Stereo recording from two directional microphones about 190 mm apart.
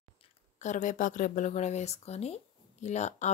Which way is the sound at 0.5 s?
40° left (ahead or behind).